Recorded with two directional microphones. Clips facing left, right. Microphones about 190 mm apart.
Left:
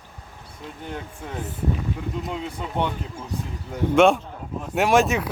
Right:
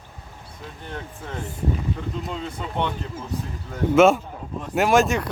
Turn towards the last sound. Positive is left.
turn(degrees=0)  # may be behind; listen again after turning